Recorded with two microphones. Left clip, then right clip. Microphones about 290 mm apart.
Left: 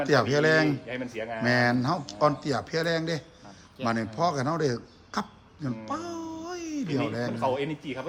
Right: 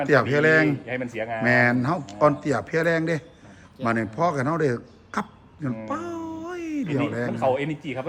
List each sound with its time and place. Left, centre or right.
0.1 s a man's voice: centre
0.9 s a man's voice: right
1.5 s a man's voice: centre
5.6 s music: centre
6.9 s a man's voice: centre
7.3 s a man's voice: right